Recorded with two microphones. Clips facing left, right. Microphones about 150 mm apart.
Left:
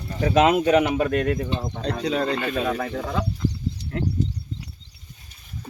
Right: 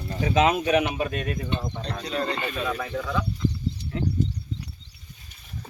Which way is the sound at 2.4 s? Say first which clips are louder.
Left 4 dB; 55° left (ahead or behind).